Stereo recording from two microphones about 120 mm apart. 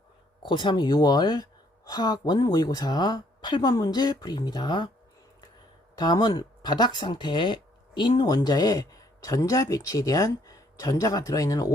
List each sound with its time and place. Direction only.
0.4 s speech: 40° left (ahead or behind)
6.0 s speech: 35° left (ahead or behind)